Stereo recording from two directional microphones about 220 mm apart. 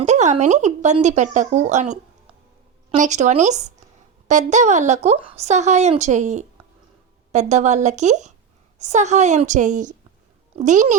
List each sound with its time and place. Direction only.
0.0 s a woman's voice: 30° right (ahead or behind)